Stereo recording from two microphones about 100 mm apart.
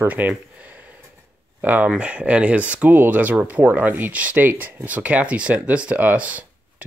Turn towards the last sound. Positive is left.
turn(degrees=-15)  # may be behind; listen again after turning